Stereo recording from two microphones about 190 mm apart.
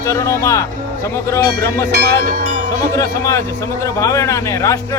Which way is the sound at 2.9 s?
15° left (ahead or behind).